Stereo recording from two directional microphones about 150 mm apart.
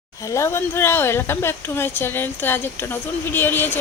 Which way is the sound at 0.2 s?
20° left (ahead or behind).